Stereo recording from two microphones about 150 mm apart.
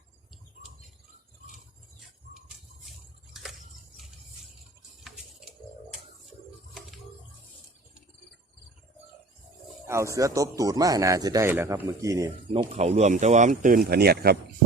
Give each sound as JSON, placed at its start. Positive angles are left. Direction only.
{"t": 9.8, "sound": "speech", "side_deg": -20}
{"t": 12.5, "sound": "speech", "side_deg": -45}